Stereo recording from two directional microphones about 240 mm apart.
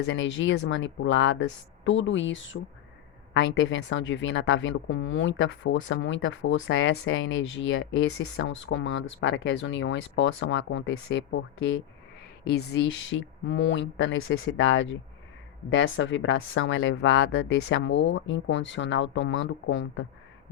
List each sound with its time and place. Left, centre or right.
0.0 s speech: left